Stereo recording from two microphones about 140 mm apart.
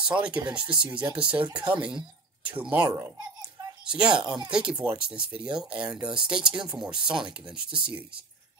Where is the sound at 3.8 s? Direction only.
5° right (ahead or behind).